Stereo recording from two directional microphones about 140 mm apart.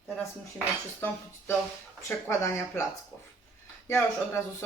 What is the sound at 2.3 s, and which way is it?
Speech, 20° left (ahead or behind).